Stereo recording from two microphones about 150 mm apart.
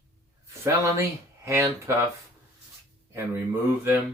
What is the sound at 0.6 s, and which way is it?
Speech, 15° right (ahead or behind).